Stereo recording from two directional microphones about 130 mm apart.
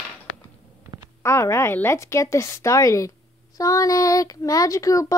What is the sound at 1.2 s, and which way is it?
Speech, 20° left (ahead or behind).